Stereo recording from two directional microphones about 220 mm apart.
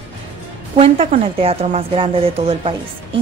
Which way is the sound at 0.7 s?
25° right (ahead or behind).